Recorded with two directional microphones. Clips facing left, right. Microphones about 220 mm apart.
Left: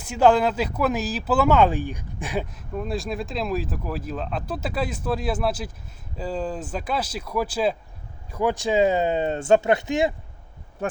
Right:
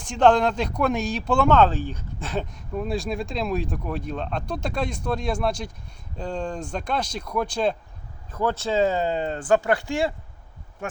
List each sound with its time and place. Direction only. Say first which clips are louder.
0.0 s speech: even; 5° left (ahead or behind)